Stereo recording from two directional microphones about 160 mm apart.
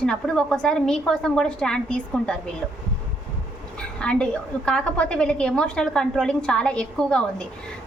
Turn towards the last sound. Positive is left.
turn(degrees=5)  # may be behind; listen again after turning